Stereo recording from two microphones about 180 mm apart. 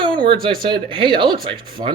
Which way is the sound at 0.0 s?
25° right (ahead or behind).